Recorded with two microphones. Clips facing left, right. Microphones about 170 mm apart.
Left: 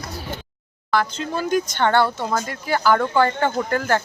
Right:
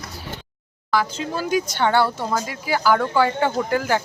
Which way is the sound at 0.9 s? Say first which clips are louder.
Left 1 dB; 5° right (ahead or behind).